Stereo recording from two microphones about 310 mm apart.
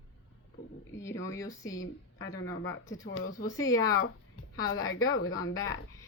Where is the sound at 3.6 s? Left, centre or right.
Centre.